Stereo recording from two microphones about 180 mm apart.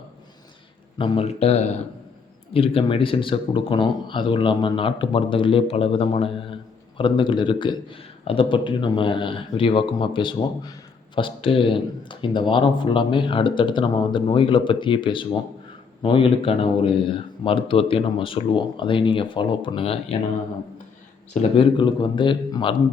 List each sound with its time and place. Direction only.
0.9 s a man's voice: 30° left (ahead or behind)
21.3 s speech: 30° left (ahead or behind)